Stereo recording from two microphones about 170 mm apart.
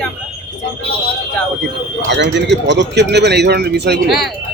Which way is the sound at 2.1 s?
90° right.